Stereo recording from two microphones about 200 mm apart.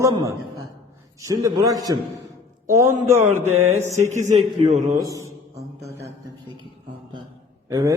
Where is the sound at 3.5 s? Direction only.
35° right (ahead or behind).